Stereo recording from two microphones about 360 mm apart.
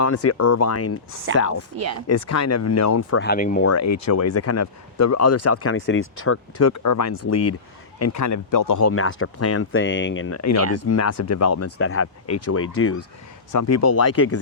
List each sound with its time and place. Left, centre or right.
0.0 s speech: left
1.7 s speech: right
2.0 s speech: left
3.2 s speech: left
3.6 s speech: left
8.9 s speech: left
13.5 s speech: left